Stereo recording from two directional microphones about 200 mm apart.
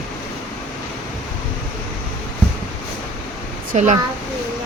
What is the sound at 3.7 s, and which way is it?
Speech, 40° right (ahead or behind).